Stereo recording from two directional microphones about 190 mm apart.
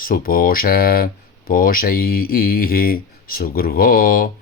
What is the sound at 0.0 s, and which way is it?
Speech, 50° left (ahead or behind).